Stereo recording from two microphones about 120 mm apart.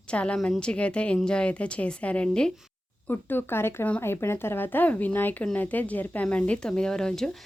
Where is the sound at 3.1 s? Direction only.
15° left (ahead or behind).